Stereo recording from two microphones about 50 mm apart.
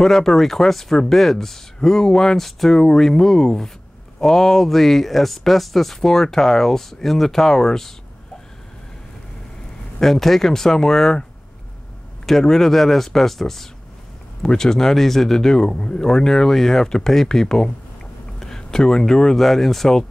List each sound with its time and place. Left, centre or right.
0.0 s speech: centre
9.9 s speech: centre
12.3 s speech: centre